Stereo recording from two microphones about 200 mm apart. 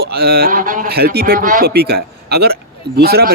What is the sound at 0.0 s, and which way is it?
Speech, 50° right (ahead or behind).